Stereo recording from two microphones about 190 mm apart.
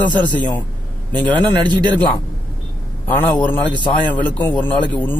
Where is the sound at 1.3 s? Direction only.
20° right (ahead or behind).